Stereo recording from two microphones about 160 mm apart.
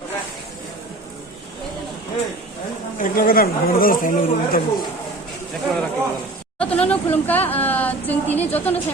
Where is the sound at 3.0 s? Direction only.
65° left (ahead or behind).